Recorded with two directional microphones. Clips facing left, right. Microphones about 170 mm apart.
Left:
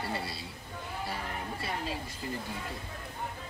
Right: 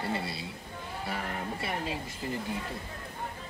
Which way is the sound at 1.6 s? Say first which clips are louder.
Even; 20° right (ahead or behind).